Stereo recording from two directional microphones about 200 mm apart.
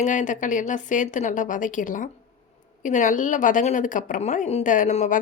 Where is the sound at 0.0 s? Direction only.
40° left (ahead or behind).